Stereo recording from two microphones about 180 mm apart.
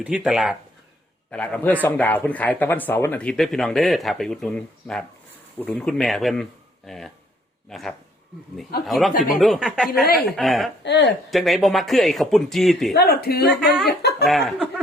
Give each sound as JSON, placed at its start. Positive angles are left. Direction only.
{"t": 0.0, "sound": "speech", "side_deg": -5}
{"t": 10.8, "sound": "speech", "side_deg": 70}
{"t": 11.3, "sound": "speech", "side_deg": 0}
{"t": 12.9, "sound": "speech", "side_deg": 60}
{"t": 14.3, "sound": "speech", "side_deg": 0}